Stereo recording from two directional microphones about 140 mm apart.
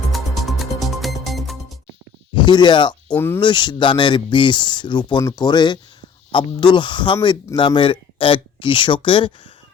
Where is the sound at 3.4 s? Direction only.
35° left (ahead or behind).